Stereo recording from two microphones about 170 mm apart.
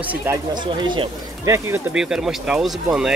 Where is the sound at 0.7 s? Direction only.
30° right (ahead or behind).